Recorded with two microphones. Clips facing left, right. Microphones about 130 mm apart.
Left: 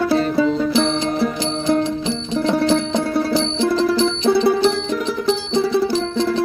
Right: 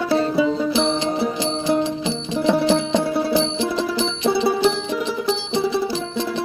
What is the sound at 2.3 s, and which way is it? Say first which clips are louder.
Music: even; 10° right (ahead or behind).